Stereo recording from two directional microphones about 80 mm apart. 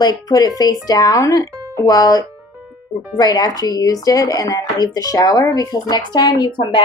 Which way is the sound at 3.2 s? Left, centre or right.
Left.